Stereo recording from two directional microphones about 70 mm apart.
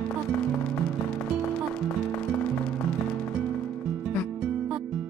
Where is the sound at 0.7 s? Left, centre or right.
Centre.